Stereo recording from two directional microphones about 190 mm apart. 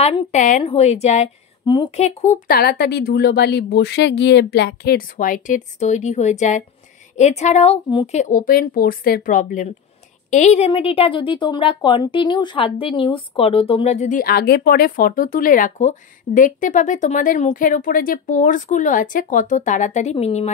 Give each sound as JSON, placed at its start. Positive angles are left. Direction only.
{"t": 0.0, "sound": "a woman's voice", "side_deg": 35}
{"t": 8.2, "sound": "a woman's voice", "side_deg": 45}